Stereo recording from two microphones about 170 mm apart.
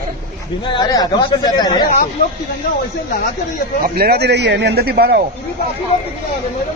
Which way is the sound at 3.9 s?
70° right (ahead or behind).